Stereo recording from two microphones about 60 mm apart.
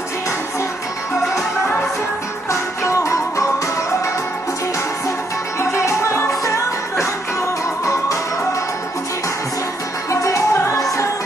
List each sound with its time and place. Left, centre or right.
2.5 s music: left
5.6 s music: left
10.5 s music: left